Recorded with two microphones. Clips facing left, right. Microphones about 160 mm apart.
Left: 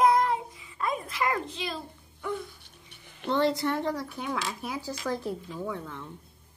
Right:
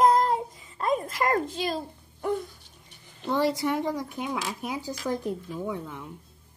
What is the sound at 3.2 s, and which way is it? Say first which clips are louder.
Speech: even; 10° right (ahead or behind).